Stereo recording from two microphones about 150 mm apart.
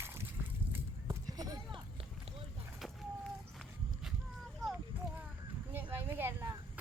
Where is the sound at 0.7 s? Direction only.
20° right (ahead or behind).